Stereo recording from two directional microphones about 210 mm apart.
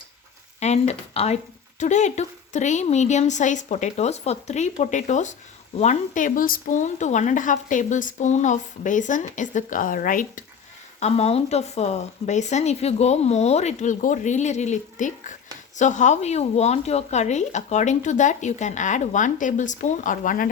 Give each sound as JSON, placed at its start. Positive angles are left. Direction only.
{"t": 0.6, "sound": "speech", "side_deg": 30}
{"t": 11.0, "sound": "speech", "side_deg": 30}